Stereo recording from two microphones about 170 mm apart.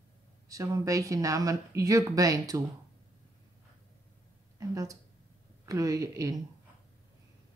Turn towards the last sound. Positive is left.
turn(degrees=-20)  # may be behind; listen again after turning